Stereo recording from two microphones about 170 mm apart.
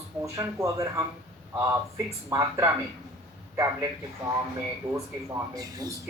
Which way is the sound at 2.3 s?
20° right (ahead or behind).